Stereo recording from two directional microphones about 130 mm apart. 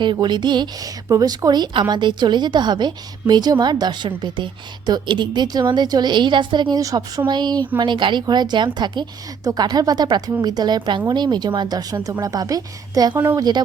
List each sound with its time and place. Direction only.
0.0 s a woman's voice: 35° right (ahead or behind)